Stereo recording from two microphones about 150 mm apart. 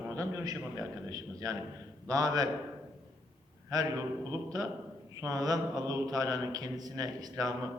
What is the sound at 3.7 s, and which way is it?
A man's voice, 25° right (ahead or behind).